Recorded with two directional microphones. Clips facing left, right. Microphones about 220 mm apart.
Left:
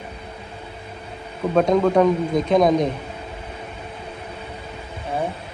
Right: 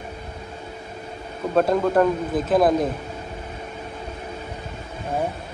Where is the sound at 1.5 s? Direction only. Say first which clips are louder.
Left 2 dB; 5° right (ahead or behind).